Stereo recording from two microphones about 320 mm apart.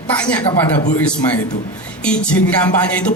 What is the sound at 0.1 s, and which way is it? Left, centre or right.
Speech, centre.